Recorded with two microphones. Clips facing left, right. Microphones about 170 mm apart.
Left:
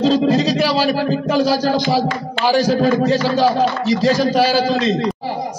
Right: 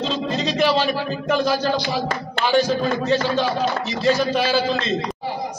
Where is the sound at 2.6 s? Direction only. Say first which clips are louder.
Left 6 dB; 40° left (ahead or behind).